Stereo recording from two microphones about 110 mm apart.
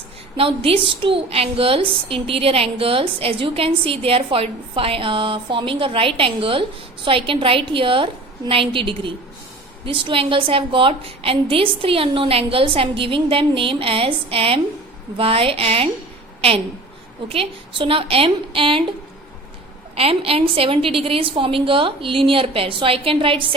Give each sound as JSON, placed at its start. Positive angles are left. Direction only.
{"t": 0.3, "sound": "a woman's voice", "side_deg": -55}
{"t": 17.2, "sound": "a woman's voice", "side_deg": -60}
{"t": 20.0, "sound": "a woman's voice", "side_deg": -60}